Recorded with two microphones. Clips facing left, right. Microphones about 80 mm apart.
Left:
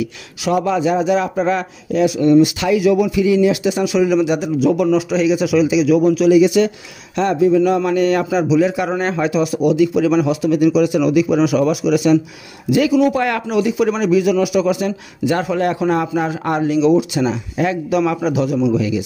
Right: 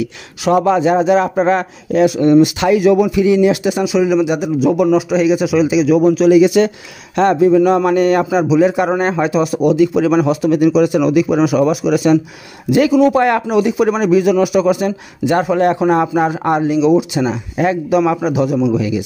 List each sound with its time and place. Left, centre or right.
0.5 s speech: right
2.0 s speech: right
3.7 s a man's voice: centre
4.6 s a man's voice: centre
5.2 s a man's voice: right
6.6 s speech: right
8.3 s a man's voice: centre
8.6 s a man's voice: right